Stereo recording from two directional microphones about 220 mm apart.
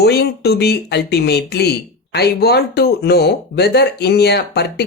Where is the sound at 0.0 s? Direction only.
50° left (ahead or behind).